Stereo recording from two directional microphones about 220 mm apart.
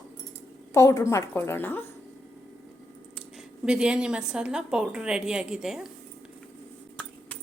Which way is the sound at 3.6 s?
5° right (ahead or behind).